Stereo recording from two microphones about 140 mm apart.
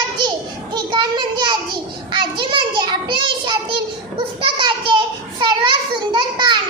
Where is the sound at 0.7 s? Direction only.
35° right (ahead or behind).